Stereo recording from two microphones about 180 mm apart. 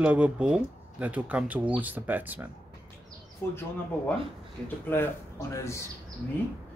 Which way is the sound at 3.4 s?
15° left (ahead or behind).